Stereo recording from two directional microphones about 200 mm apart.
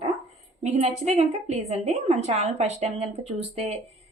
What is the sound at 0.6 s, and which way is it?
A woman's voice, 35° right (ahead or behind).